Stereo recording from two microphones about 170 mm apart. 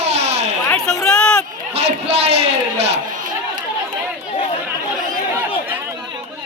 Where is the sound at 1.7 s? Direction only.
35° right (ahead or behind).